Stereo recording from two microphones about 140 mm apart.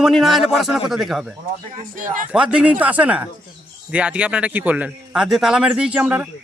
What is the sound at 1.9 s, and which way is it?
Speech, 70° right (ahead or behind).